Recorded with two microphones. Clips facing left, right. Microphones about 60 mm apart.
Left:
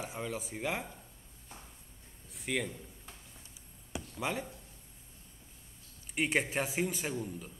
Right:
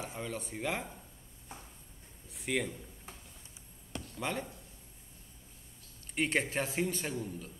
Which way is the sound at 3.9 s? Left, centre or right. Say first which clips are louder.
Left 1 dB; centre.